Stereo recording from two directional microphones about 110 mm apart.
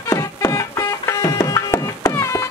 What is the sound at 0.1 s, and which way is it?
Music, 25° left (ahead or behind).